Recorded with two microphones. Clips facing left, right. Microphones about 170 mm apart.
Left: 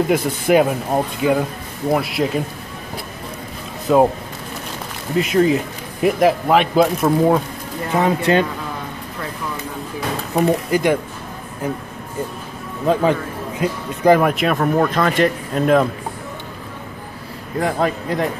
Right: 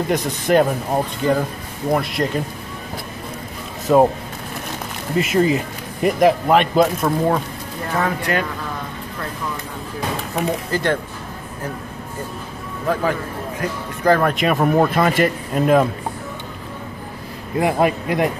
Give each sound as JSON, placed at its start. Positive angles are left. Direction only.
{"t": 0.1, "sound": "speech", "side_deg": 5}
{"t": 3.8, "sound": "speech", "side_deg": 0}
{"t": 5.1, "sound": "speech", "side_deg": 0}
{"t": 7.9, "sound": "speech", "side_deg": 20}
{"t": 10.7, "sound": "speech", "side_deg": 10}
{"t": 12.8, "sound": "a man's voice", "side_deg": 20}
{"t": 14.3, "sound": "speech", "side_deg": 0}
{"t": 14.6, "sound": "a man's voice", "side_deg": -10}
{"t": 17.6, "sound": "a man's voice", "side_deg": -15}